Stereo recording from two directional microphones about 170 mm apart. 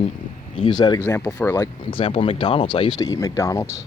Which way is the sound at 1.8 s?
30° left (ahead or behind).